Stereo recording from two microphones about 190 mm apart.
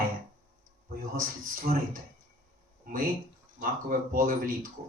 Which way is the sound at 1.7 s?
50° right (ahead or behind).